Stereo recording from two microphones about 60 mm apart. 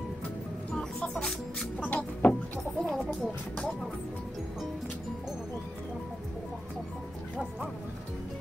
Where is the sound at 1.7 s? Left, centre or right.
Left.